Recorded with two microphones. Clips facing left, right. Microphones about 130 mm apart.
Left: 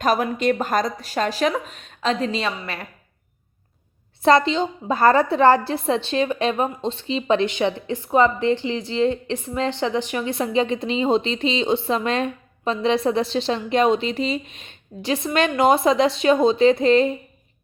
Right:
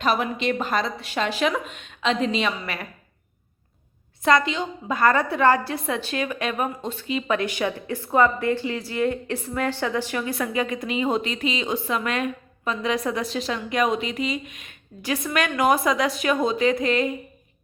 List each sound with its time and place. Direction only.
0.0 s a woman's voice: 45° left (ahead or behind)
4.2 s a woman's voice: 30° left (ahead or behind)